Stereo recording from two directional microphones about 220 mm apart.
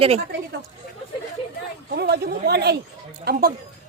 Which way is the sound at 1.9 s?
45° right (ahead or behind).